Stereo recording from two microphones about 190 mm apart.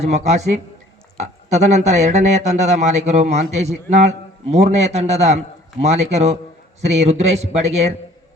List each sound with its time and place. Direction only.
0.0 s speech: 35° right (ahead or behind)